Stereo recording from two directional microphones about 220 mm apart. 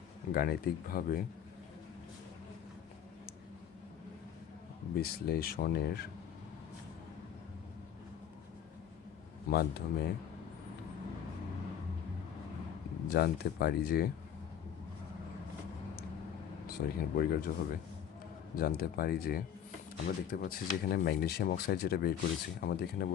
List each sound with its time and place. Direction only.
0.3 s speech: 40° left (ahead or behind)
4.9 s speech: 45° left (ahead or behind)
9.5 s speech: 45° left (ahead or behind)
13.1 s speech: 45° left (ahead or behind)
16.6 s speech: 45° left (ahead or behind)